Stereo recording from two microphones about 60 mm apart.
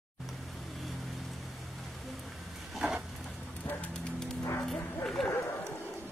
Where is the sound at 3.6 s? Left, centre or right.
Left.